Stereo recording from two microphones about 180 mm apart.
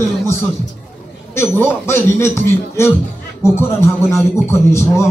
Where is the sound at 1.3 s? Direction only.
15° left (ahead or behind).